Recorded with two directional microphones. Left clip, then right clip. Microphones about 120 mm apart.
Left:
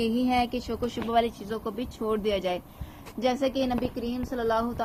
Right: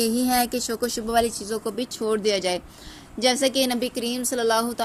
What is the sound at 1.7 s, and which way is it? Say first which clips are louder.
A woman's voice: right 4 dB; 35° right (ahead or behind).